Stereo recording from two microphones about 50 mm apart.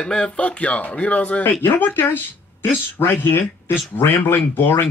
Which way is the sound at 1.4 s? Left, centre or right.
Left.